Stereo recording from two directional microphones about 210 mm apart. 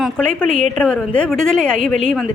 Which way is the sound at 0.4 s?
35° right (ahead or behind).